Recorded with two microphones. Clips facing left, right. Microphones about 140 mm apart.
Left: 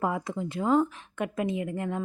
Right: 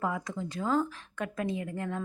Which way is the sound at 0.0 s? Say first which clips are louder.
Left 4 dB; 25° left (ahead or behind).